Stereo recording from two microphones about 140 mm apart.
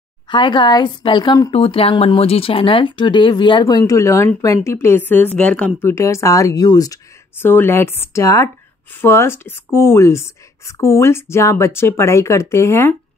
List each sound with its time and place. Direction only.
0.3 s speech: 35° left (ahead or behind)
1.5 s a woman's voice: 45° left (ahead or behind); by 12.9 s 20° left (ahead or behind)